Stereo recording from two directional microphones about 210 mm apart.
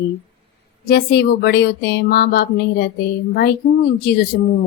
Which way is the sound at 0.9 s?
50° left (ahead or behind).